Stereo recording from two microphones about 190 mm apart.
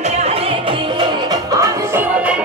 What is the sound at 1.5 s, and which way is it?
Music, 15° right (ahead or behind).